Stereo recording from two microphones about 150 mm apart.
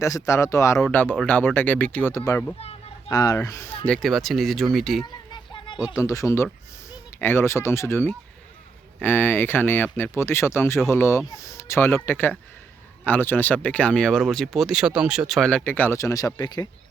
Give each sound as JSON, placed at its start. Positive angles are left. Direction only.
{"t": 0.0, "sound": "speech", "side_deg": 20}
{"t": 3.8, "sound": "speech", "side_deg": 5}
{"t": 5.0, "sound": "a sound", "side_deg": 30}
{"t": 6.0, "sound": "speech", "side_deg": 20}